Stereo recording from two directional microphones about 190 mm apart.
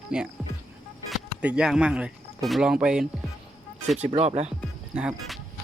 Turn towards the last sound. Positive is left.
turn(degrees=0)  # may be behind; listen again after turning